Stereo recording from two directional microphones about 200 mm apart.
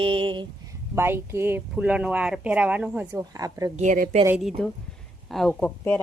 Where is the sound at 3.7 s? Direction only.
40° right (ahead or behind).